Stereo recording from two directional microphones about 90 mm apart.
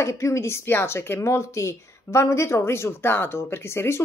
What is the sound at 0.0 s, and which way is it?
Speech, 30° left (ahead or behind).